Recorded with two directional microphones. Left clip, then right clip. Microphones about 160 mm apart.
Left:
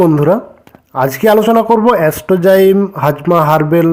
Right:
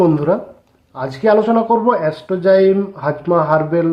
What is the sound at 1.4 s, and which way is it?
A man's voice, 45° left (ahead or behind).